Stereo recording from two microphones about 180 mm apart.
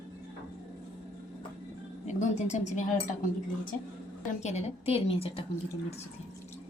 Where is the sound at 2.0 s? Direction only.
40° left (ahead or behind).